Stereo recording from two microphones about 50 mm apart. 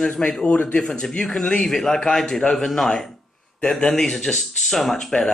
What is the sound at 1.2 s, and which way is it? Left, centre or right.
A man's voice, centre.